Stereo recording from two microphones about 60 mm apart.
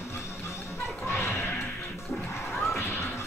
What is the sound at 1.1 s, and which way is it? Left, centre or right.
Music, left.